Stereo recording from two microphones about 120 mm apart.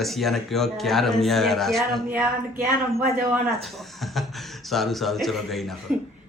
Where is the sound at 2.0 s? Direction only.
20° right (ahead or behind).